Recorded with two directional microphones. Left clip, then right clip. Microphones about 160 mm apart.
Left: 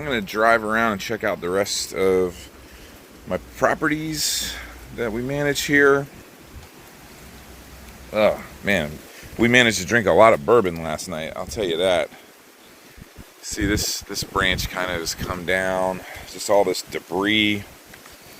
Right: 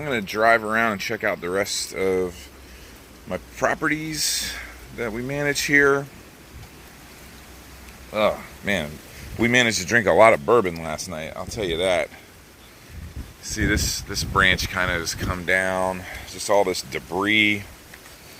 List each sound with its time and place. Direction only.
0.0 s speech: 10° right (ahead or behind); by 3.8 s 25° left (ahead or behind)
3.8 s speech: 10° left (ahead or behind)
8.1 s speech: 25° left (ahead or behind)
10.0 s speech: centre (ahead or behind); by 12.0 s 15° left (ahead or behind)
13.6 s speech: 15° left (ahead or behind)